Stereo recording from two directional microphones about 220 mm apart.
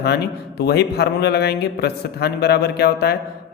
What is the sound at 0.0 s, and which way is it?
A man's voice, 50° left (ahead or behind).